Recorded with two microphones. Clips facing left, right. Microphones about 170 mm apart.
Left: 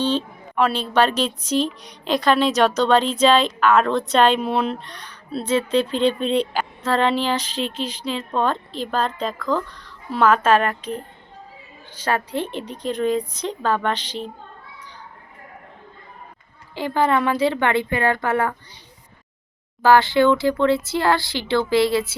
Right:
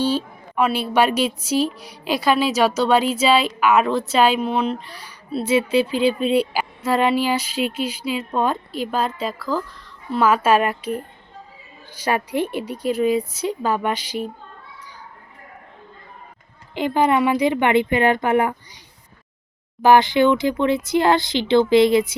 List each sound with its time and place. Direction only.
0.0 s speech: 10° right (ahead or behind)
16.7 s speech: 15° right (ahead or behind)
19.8 s speech: 15° right (ahead or behind)